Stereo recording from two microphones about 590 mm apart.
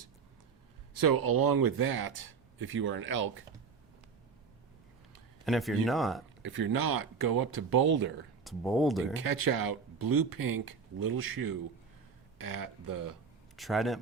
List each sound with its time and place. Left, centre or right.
0.9 s speech: right
3.0 s speech: centre
5.5 s speech: centre
6.5 s speech: right
8.4 s speech: centre
9.1 s speech: right
13.6 s speech: centre